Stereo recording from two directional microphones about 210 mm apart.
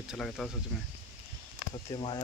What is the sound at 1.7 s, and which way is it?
Speech, 25° left (ahead or behind).